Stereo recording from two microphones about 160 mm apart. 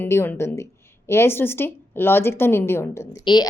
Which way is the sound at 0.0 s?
15° left (ahead or behind).